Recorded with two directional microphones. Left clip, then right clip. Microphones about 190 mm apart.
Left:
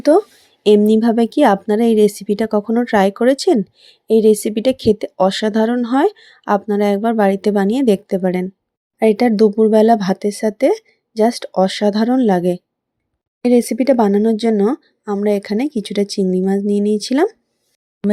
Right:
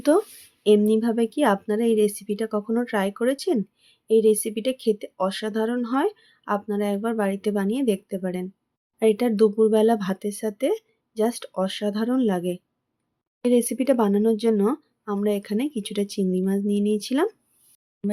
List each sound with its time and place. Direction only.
0.0 s speech: 20° left (ahead or behind)
0.9 s speech: 30° left (ahead or behind)
18.0 s a sound: centre (ahead or behind)